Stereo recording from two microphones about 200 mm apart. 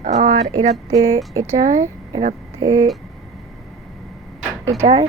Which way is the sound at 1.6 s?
35° right (ahead or behind).